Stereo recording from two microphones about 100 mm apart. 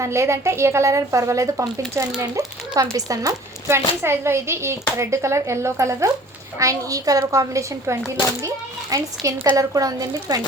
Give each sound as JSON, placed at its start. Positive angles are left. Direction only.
{"t": 0.0, "sound": "a child's voice", "side_deg": -30}